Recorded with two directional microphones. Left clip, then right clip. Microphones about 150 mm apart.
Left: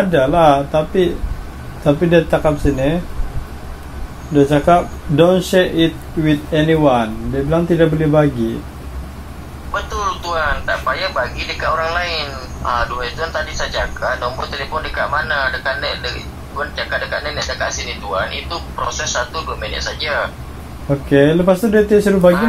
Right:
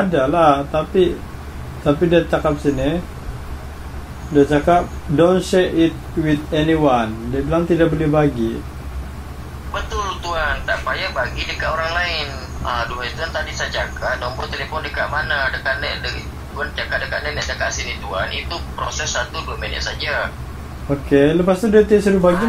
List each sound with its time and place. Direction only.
0.1 s speech: 5° left (ahead or behind)
4.3 s speech: 10° left (ahead or behind)
9.8 s a man's voice: 15° left (ahead or behind)
21.1 s speech: centre (ahead or behind)